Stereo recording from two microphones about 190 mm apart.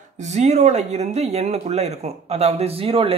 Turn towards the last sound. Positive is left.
turn(degrees=-30)  # may be behind; listen again after turning